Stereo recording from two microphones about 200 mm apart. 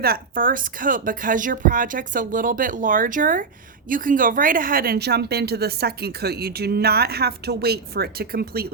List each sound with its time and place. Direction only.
0.0 s speech: 45° right (ahead or behind)